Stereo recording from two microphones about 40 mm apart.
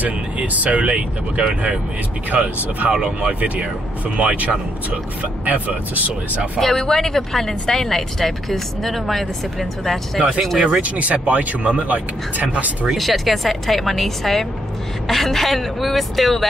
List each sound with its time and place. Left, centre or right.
0.0 s speech: right
0.8 s speech: right
2.3 s speech: right
2.9 s speech: right
3.3 s speech: right
5.2 s speech: right
6.6 s speech: centre
10.6 s speech: right
12.9 s speech: centre